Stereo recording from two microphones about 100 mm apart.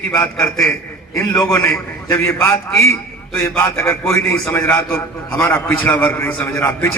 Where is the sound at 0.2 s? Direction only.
25° left (ahead or behind).